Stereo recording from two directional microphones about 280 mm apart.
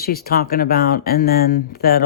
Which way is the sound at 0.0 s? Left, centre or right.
Left.